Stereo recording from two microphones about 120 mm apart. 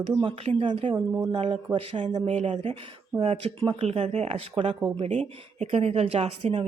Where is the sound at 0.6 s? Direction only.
45° right (ahead or behind).